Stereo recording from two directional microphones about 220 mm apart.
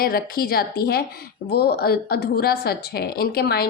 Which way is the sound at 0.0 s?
45° left (ahead or behind).